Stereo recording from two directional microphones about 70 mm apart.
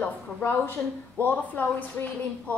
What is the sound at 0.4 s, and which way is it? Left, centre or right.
A woman's voice, left.